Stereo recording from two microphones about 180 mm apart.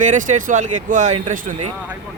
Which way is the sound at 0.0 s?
45° right (ahead or behind).